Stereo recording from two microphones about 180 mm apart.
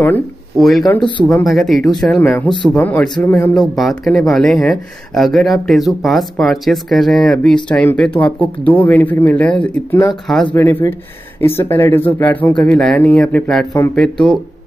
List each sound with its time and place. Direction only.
0.0 s speech: 5° left (ahead or behind)
0.9 s speech: 25° left (ahead or behind)
1.5 s speech: centre (ahead or behind)